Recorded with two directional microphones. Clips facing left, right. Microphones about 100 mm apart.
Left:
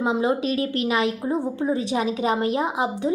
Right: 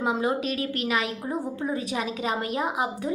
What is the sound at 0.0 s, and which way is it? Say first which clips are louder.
A woman's voice: left 3 dB; 25° left (ahead or behind).